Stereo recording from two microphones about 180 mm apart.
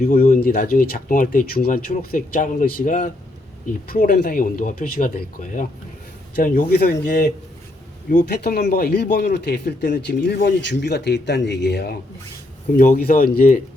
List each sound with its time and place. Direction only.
0.0 s speech: 40° left (ahead or behind)
0.3 s speech: 55° left (ahead or behind)
12.7 s speech: 50° left (ahead or behind)